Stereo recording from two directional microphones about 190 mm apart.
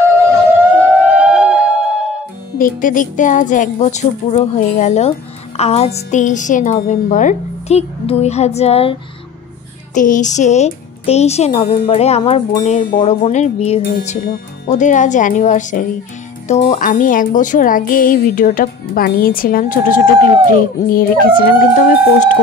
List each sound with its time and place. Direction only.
0.7 s music: 5° right (ahead or behind)
2.6 s a woman's voice: 45° left (ahead or behind)
9.9 s a woman's voice: 40° left (ahead or behind)
13.0 s speech: 25° left (ahead or behind)
13.3 s a woman's voice: 35° left (ahead or behind)